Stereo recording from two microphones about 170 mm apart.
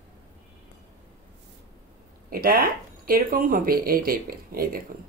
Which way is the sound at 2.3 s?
60° right (ahead or behind).